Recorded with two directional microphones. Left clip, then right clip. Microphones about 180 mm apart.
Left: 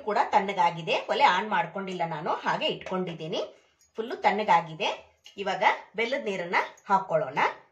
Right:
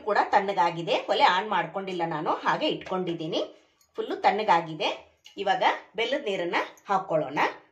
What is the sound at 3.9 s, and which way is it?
A woman's voice, 30° right (ahead or behind).